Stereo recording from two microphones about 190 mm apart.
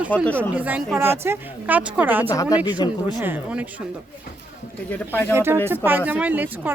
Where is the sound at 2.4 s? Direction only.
20° left (ahead or behind).